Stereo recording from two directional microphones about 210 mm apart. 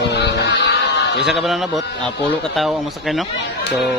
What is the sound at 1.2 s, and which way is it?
Speech, centre (ahead or behind).